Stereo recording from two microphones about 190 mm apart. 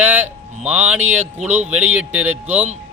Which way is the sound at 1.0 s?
35° right (ahead or behind).